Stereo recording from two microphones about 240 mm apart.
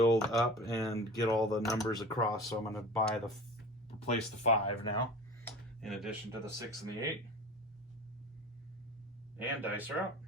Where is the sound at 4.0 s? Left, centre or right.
Left.